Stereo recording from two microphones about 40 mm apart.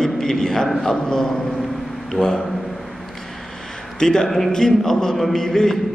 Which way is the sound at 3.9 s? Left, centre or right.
Centre.